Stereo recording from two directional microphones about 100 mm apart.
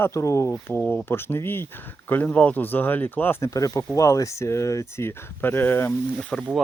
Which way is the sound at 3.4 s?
35° left (ahead or behind).